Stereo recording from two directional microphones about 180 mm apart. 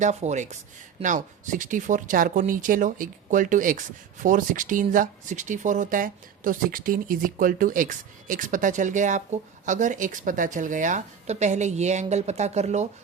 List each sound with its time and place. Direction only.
0.0 s speech: 40° right (ahead or behind)